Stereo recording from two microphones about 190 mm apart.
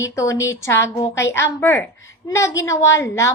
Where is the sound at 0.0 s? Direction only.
15° left (ahead or behind).